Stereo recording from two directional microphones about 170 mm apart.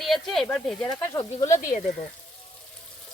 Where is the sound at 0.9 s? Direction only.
20° left (ahead or behind).